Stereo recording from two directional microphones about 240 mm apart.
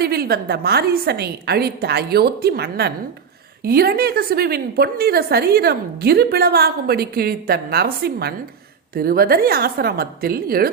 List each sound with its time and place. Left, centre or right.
0.0 s a woman's voice: right